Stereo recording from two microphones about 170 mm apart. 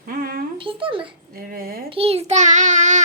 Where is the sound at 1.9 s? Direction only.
35° right (ahead or behind).